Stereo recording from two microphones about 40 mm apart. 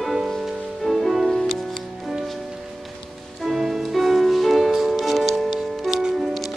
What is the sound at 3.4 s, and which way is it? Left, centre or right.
Music, centre.